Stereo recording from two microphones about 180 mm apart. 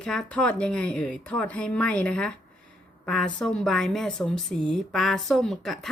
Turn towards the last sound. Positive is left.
turn(degrees=0)  # may be behind; listen again after turning